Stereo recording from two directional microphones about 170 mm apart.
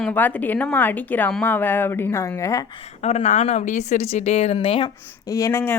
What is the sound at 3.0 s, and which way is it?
A woman's voice, 40° left (ahead or behind).